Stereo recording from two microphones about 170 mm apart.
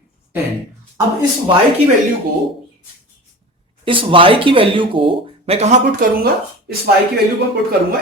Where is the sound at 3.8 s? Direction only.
30° right (ahead or behind); by 6.9 s 65° right (ahead or behind).